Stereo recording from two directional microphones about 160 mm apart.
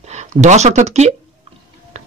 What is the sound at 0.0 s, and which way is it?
A man's voice, 45° right (ahead or behind).